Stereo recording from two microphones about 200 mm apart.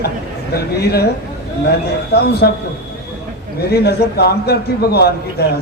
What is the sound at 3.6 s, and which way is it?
A man's voice, 50° left (ahead or behind).